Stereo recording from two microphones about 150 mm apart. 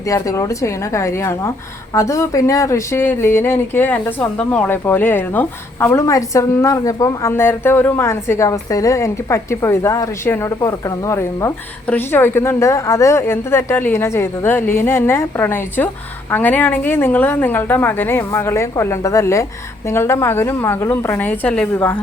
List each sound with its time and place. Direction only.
0.0 s a woman's voice: 20° left (ahead or behind)